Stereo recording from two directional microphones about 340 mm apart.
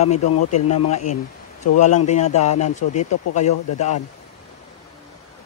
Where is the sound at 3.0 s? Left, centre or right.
Left.